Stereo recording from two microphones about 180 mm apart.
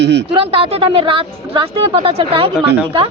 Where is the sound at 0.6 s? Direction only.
30° right (ahead or behind).